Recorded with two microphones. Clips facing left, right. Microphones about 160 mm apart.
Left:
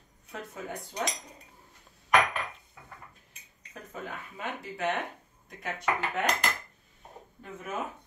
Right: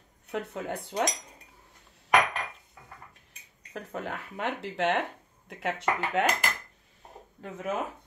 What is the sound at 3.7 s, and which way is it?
Speech, 70° right (ahead or behind).